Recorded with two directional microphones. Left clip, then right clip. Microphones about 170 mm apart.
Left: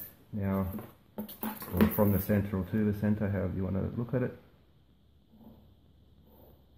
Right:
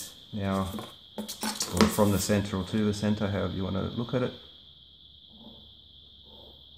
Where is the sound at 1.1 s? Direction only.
20° right (ahead or behind).